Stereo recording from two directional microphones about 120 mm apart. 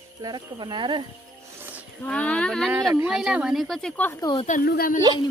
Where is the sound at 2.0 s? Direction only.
10° left (ahead or behind).